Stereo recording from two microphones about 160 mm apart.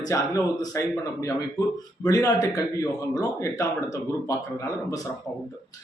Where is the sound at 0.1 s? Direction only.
20° left (ahead or behind).